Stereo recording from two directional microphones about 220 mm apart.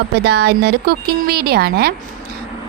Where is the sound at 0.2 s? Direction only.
50° right (ahead or behind).